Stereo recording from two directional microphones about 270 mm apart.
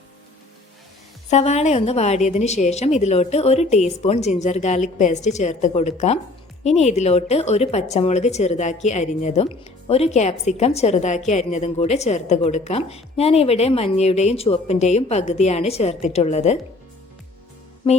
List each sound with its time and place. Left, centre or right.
1.3 s a woman's voice: left